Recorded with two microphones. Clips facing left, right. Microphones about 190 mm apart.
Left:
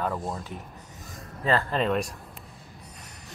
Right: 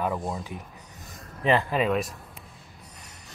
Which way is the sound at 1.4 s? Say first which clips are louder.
Right 2 dB; 15° right (ahead or behind).